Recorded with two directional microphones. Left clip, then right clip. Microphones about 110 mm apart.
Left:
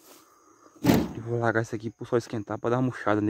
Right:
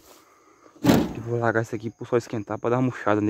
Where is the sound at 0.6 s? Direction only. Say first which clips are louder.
Right 3 dB; 35° right (ahead or behind).